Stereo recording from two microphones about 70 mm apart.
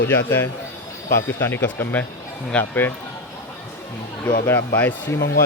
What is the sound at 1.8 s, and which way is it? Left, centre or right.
Speech, left.